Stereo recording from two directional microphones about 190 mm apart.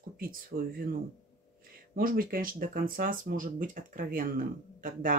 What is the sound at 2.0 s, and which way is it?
Speech, 50° right (ahead or behind).